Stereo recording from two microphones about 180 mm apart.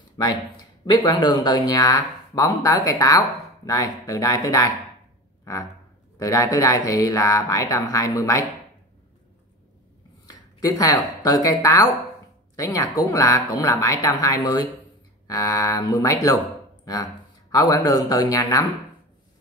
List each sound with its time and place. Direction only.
0.2 s speech: 20° left (ahead or behind)
5.4 s a sound: 20° left (ahead or behind)
6.1 s speech: 20° left (ahead or behind)
10.6 s speech: 20° left (ahead or behind)